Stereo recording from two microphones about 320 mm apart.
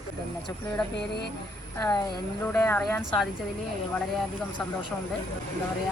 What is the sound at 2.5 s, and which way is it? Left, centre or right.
Speech, centre.